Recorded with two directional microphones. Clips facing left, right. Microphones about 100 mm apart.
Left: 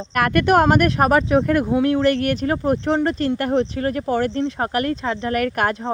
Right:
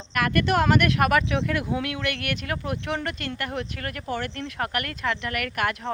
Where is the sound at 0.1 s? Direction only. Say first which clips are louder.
Left 6 dB; 50° left (ahead or behind).